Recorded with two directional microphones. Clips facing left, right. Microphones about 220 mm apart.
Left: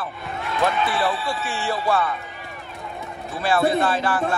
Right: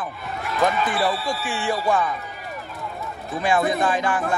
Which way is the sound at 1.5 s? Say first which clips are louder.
Right 3 dB; 15° right (ahead or behind).